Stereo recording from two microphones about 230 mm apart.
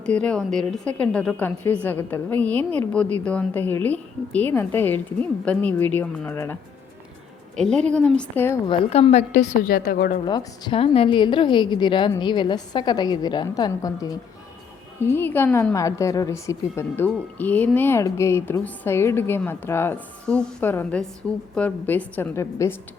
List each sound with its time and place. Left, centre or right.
0.0 s a woman's voice: centre
8.6 s a woman's voice: left
10.2 s a woman's voice: centre